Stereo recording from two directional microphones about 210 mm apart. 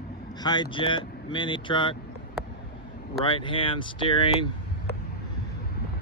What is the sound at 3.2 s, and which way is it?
Speech, 25° left (ahead or behind).